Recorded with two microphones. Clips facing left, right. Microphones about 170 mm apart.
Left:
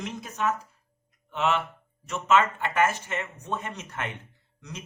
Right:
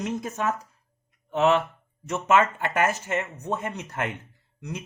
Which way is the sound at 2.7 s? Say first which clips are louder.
Right 1 dB; 40° right (ahead or behind).